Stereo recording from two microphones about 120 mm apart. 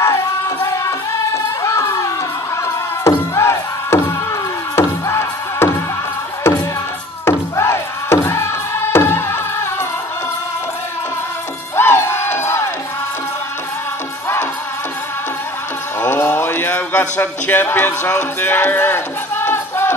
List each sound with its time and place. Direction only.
0.0 s music: 25° left (ahead or behind)
7.2 s music: 20° left (ahead or behind)
11.7 s crowd: 20° left (ahead or behind)
16.0 s a sound: 15° left (ahead or behind)